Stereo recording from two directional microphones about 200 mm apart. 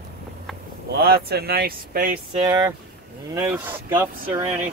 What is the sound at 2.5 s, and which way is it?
Speech, 15° right (ahead or behind).